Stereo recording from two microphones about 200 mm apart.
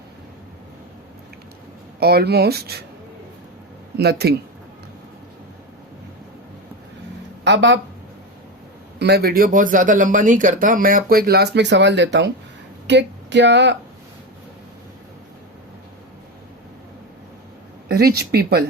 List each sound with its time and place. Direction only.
2.0 s speech: 50° right (ahead or behind)
3.9 s speech: 55° right (ahead or behind)
7.4 s speech: 65° right (ahead or behind)
9.0 s speech: 55° right (ahead or behind)
17.8 s speech: 50° right (ahead or behind)